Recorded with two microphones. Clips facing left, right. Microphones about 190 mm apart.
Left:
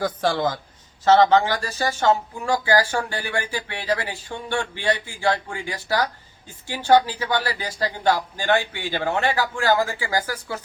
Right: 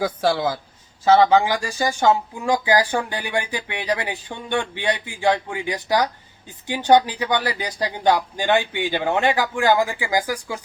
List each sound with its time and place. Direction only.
0.0 s speech: 10° right (ahead or behind)